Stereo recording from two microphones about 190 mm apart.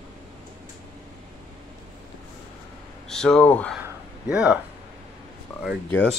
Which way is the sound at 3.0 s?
Centre (ahead or behind).